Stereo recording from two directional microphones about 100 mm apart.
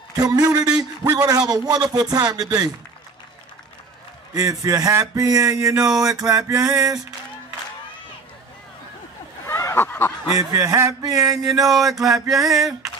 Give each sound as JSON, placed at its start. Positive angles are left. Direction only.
{"t": 0.2, "sound": "speech", "side_deg": -40}
{"t": 4.3, "sound": "speech", "side_deg": -35}
{"t": 9.5, "sound": "a sound", "side_deg": 25}
{"t": 9.8, "sound": "speech", "side_deg": 20}
{"t": 10.3, "sound": "speech", "side_deg": -30}
{"t": 11.7, "sound": "a sound", "side_deg": 0}